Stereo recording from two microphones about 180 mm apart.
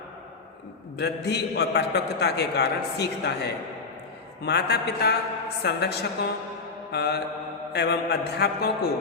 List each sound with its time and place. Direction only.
0.9 s a man's voice: 70° left (ahead or behind)